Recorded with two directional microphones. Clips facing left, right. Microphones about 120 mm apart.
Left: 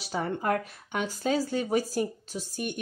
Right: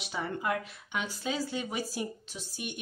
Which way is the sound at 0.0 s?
40° left (ahead or behind).